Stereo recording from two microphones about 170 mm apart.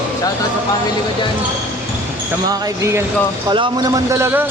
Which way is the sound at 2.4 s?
20° right (ahead or behind).